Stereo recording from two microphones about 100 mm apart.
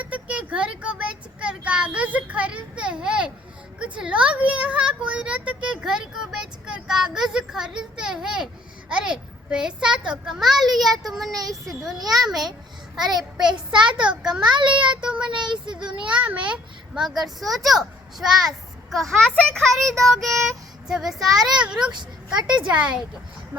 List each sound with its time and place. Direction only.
0.0 s child singing: 15° right (ahead or behind)
3.8 s a child's voice: 10° right (ahead or behind)
11.3 s speech: 40° right (ahead or behind)
11.7 s a child's voice: centre (ahead or behind)
13.5 s speech: 50° right (ahead or behind)
14.2 s speech: 5° right (ahead or behind)
14.5 s speech: 50° right (ahead or behind)
15.0 s speech: 10° right (ahead or behind)
15.3 s speech: 50° right (ahead or behind)
16.1 s a child's voice: 10° right (ahead or behind)